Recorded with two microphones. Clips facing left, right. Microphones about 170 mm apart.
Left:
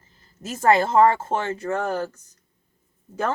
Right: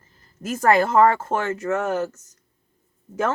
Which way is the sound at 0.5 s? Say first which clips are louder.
Even; 25° left (ahead or behind).